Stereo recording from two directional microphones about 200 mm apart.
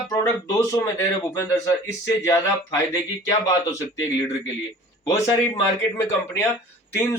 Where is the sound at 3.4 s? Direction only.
15° left (ahead or behind).